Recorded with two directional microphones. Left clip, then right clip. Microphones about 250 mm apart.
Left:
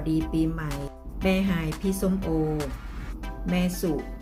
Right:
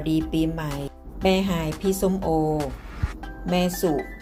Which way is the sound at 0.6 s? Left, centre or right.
Centre.